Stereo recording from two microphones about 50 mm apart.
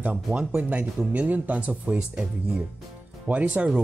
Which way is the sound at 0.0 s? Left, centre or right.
Right.